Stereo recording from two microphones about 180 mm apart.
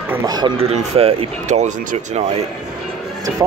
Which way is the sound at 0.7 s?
35° right (ahead or behind).